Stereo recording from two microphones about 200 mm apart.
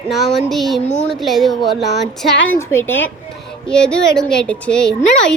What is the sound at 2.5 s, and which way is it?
A child's voice, 10° left (ahead or behind).